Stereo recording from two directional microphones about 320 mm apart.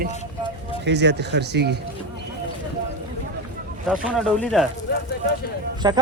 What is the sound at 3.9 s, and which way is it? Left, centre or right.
Speech, centre.